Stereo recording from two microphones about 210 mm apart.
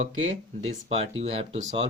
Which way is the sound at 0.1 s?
70° right (ahead or behind).